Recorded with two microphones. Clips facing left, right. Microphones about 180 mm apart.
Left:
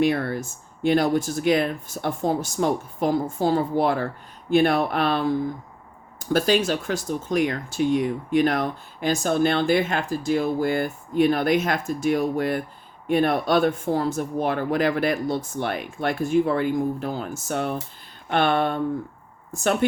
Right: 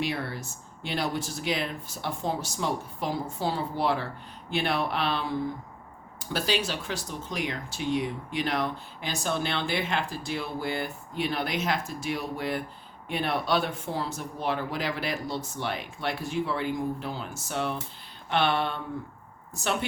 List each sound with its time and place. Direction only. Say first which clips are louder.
0.0 s speech: left 9 dB; 55° left (ahead or behind)